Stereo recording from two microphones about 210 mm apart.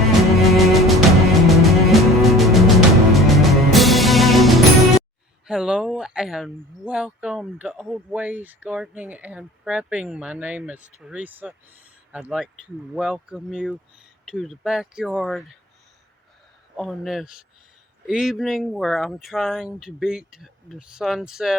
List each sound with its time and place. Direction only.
0.2 s music: centre (ahead or behind)
5.5 s speech: 5° right (ahead or behind)
16.7 s speech: centre (ahead or behind)